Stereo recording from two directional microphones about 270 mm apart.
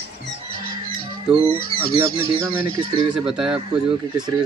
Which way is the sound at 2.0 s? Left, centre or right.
Centre.